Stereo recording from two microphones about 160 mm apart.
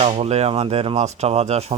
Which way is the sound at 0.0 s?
40° right (ahead or behind).